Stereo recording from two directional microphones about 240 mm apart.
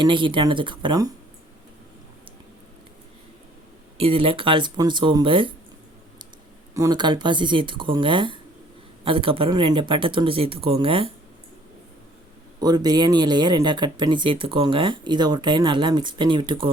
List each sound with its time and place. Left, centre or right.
0.0 s speech: centre
3.9 s speech: right
6.7 s speech: centre
12.5 s speech: centre